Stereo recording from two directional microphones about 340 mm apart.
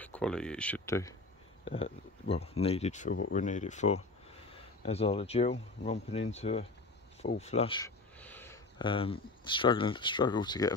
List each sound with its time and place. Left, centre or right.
0.0 s speech: centre